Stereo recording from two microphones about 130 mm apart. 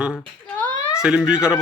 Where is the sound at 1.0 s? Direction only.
5° right (ahead or behind).